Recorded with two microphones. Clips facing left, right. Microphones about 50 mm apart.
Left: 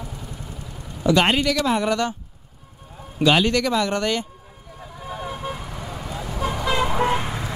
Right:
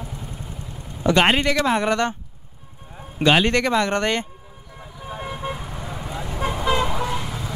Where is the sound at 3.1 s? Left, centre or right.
Right.